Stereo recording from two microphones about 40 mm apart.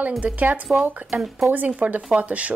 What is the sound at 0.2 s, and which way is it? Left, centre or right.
Speech, right.